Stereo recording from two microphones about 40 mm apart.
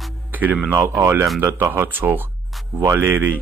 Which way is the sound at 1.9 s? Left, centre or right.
Right.